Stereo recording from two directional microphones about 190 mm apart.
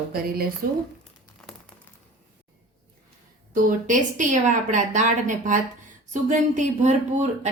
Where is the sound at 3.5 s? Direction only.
45° right (ahead or behind).